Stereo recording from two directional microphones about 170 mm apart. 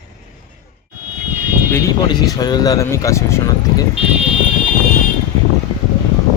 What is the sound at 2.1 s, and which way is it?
Speech, 25° left (ahead or behind).